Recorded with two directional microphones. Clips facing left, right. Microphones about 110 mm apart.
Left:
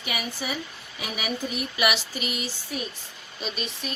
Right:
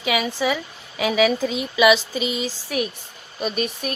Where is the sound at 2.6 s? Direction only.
75° right (ahead or behind).